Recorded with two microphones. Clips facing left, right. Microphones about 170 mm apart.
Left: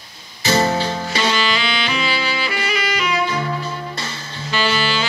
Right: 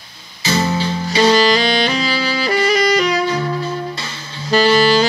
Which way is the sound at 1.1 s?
40° right (ahead or behind).